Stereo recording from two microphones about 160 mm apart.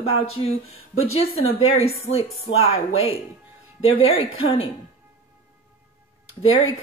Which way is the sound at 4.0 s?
35° left (ahead or behind).